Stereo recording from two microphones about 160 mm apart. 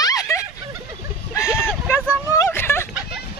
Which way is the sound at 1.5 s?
5° right (ahead or behind).